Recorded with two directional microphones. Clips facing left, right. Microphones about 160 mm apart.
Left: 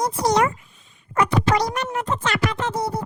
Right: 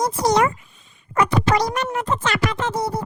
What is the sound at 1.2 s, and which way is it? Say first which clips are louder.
Speech: right 1 dB; 90° right.